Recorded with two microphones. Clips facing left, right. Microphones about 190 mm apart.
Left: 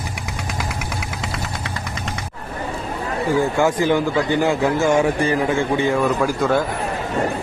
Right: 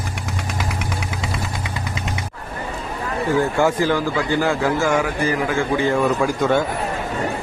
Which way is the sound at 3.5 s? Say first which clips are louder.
Left 1 dB; 20° left (ahead or behind).